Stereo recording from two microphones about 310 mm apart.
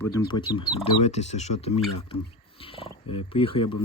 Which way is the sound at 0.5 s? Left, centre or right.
Centre.